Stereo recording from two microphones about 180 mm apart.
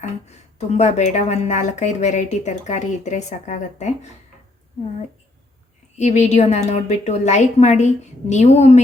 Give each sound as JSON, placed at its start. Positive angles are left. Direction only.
{"t": 0.0, "sound": "speech", "side_deg": 40}
{"t": 6.0, "sound": "speech", "side_deg": 40}